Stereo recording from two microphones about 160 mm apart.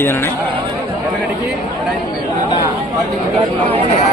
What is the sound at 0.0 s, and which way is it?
Speech, 15° left (ahead or behind).